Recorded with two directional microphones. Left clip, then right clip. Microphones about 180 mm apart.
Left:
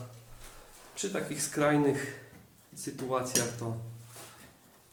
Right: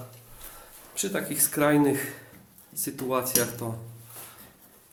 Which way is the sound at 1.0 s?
35° right (ahead or behind).